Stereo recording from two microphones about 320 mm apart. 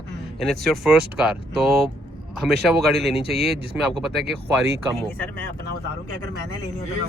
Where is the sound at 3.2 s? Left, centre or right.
Centre.